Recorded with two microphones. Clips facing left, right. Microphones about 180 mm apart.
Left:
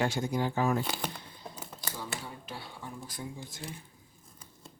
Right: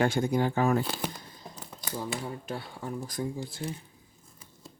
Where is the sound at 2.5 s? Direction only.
45° right (ahead or behind).